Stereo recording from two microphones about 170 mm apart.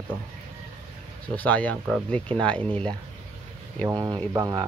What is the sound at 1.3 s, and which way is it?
Speech, 10° left (ahead or behind).